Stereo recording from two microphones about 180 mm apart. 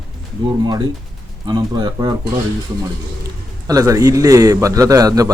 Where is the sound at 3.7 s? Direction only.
20° right (ahead or behind).